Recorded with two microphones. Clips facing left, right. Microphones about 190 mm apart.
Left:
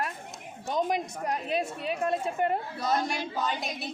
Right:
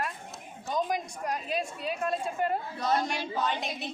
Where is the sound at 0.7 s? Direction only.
20° left (ahead or behind).